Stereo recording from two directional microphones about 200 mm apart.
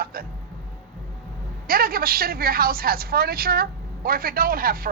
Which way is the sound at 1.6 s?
45° right (ahead or behind).